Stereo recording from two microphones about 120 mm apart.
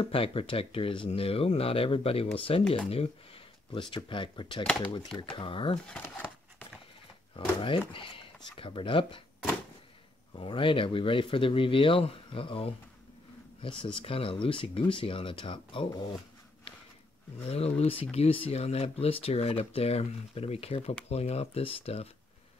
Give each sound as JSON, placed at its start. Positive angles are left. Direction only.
{"t": 0.0, "sound": "speech", "side_deg": 50}
{"t": 3.9, "sound": "speech", "side_deg": 45}
{"t": 5.9, "sound": "speech", "side_deg": 10}
{"t": 7.3, "sound": "speech", "side_deg": 45}
{"t": 10.3, "sound": "speech", "side_deg": 45}
{"t": 17.5, "sound": "speech", "side_deg": 60}